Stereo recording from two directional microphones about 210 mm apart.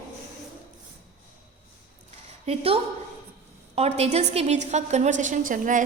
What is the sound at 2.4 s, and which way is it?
A woman's voice, 25° right (ahead or behind).